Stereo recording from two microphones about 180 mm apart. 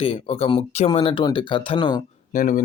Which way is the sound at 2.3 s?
50° left (ahead or behind).